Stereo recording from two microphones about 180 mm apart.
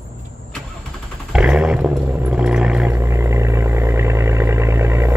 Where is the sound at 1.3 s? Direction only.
5° right (ahead or behind).